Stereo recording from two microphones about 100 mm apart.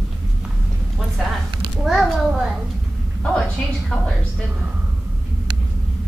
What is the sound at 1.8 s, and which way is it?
Speech, centre (ahead or behind).